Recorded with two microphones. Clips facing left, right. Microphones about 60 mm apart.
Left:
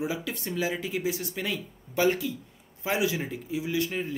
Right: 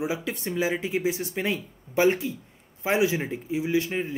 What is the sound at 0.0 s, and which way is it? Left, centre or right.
Speech, right.